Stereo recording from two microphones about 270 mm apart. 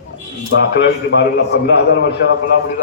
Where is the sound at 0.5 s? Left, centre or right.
Left.